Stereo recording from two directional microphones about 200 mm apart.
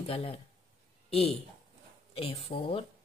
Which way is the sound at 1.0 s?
30° left (ahead or behind).